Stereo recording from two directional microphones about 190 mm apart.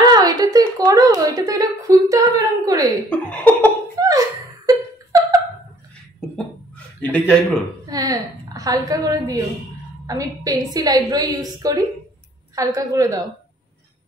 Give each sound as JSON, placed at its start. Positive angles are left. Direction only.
{"t": 0.1, "sound": "a woman's voice", "side_deg": -20}
{"t": 3.1, "sound": "speech", "side_deg": 5}
{"t": 4.0, "sound": "a sound", "side_deg": -20}
{"t": 7.0, "sound": "speech", "side_deg": 10}
{"t": 7.8, "sound": "a woman's voice", "side_deg": -20}